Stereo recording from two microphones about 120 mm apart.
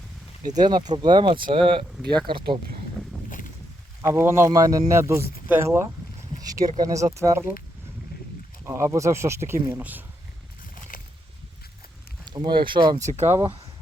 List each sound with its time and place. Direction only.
0.5 s speech: 35° right (ahead or behind)
4.0 s speech: 20° right (ahead or behind)
8.6 s speech: 25° right (ahead or behind)
12.2 s speech: 35° right (ahead or behind)
13.1 s speech: 75° right (ahead or behind)